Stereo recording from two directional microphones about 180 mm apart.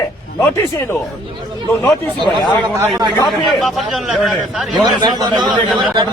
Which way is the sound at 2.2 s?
25° left (ahead or behind).